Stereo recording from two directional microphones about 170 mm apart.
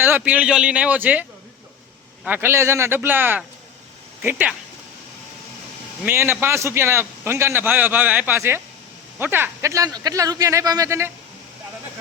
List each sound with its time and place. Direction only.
0.0 s a man's voice: 10° right (ahead or behind)
2.2 s a man's voice: 10° right (ahead or behind)
6.1 s a man's voice: 10° right (ahead or behind)